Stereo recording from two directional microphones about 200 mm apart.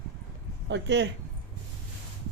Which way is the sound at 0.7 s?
60° right (ahead or behind).